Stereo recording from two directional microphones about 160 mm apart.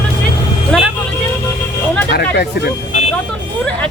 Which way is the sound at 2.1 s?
80° left.